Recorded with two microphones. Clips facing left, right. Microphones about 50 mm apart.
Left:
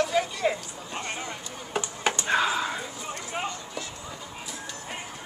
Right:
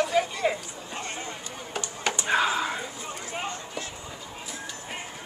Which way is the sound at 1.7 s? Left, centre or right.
Centre.